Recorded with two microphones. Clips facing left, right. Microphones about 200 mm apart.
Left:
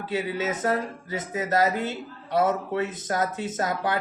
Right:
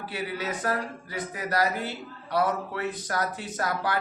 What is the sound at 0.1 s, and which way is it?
Speech, 20° left (ahead or behind).